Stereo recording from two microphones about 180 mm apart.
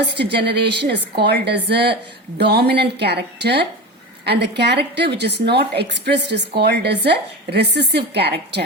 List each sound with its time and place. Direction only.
0.2 s a woman's voice: 70° right (ahead or behind)